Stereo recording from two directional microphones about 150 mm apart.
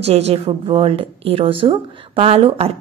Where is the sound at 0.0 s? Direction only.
45° right (ahead or behind).